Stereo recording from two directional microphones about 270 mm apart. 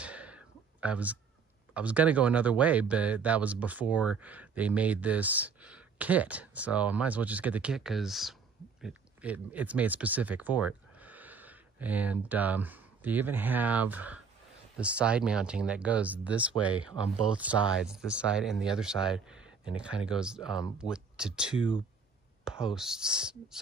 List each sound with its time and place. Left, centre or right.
0.0 s a sound: centre
1.7 s speech: centre
22.4 s whispering: centre
22.8 s speech: centre